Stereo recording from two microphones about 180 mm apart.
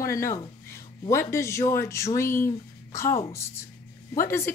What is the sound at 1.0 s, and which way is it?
A woman's voice, 15° left (ahead or behind).